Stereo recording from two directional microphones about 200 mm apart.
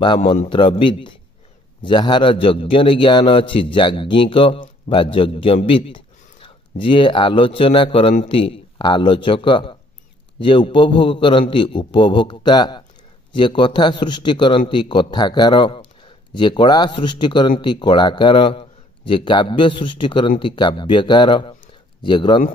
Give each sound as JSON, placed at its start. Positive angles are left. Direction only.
{"t": 0.0, "sound": "a man's voice", "side_deg": 25}